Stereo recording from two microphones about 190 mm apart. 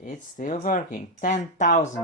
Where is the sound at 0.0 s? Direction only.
45° left (ahead or behind).